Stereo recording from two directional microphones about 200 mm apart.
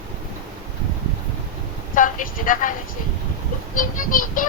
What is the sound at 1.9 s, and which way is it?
Speech, 40° left (ahead or behind).